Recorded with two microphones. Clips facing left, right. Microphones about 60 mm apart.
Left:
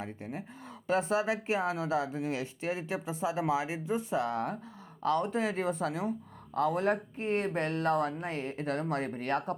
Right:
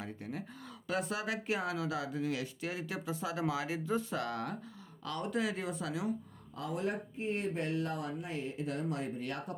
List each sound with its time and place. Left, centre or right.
0.0 s speech: left
6.5 s speech: left